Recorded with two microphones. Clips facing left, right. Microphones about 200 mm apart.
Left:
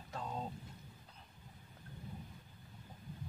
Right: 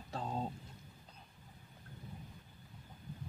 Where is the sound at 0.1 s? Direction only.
30° right (ahead or behind).